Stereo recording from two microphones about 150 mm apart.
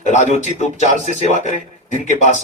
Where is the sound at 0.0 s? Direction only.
50° left (ahead or behind).